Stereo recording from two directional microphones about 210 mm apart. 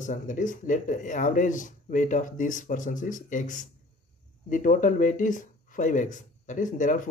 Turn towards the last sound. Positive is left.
turn(degrees=40)  # may be behind; listen again after turning